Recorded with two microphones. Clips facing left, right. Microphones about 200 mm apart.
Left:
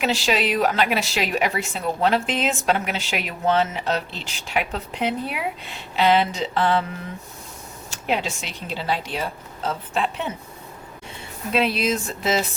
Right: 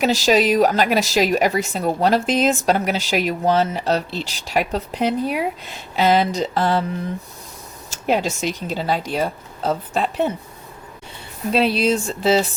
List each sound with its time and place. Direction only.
0.0 s a woman's voice: 40° right (ahead or behind)
7.9 s a woman's voice: 45° right (ahead or behind)
11.5 s a woman's voice: 35° right (ahead or behind)